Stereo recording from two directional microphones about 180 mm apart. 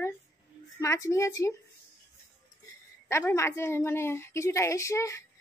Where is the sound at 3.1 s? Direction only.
15° left (ahead or behind).